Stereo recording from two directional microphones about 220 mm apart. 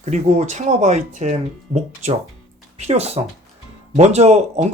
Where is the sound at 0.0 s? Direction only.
30° right (ahead or behind).